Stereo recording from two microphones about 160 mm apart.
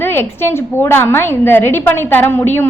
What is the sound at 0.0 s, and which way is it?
A woman's voice, 15° left (ahead or behind).